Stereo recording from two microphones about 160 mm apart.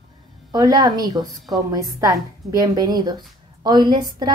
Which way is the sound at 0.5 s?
25° right (ahead or behind).